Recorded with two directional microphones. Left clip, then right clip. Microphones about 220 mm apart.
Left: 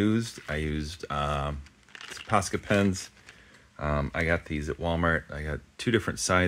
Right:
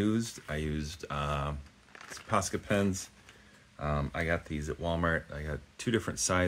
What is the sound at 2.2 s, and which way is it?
Speech, 35° left (ahead or behind).